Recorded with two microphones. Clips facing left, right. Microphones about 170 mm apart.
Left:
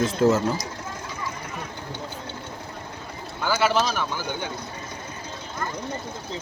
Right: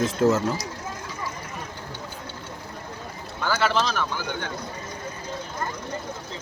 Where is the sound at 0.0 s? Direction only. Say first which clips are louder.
Left 1 dB; centre (ahead or behind).